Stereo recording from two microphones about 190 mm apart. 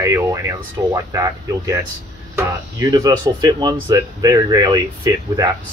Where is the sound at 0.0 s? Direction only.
15° right (ahead or behind).